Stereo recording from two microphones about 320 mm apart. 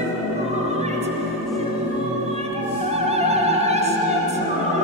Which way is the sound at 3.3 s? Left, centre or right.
Centre.